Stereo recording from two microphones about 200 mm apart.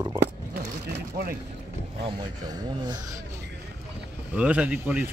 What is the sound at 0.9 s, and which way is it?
Vehicle, 50° right (ahead or behind).